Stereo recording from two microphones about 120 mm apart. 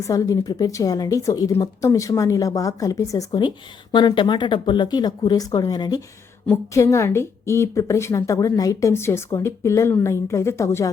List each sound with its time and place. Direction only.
0.0 s a woman's voice: 25° left (ahead or behind)